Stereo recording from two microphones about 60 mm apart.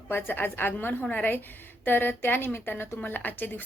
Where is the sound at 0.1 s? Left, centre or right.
Left.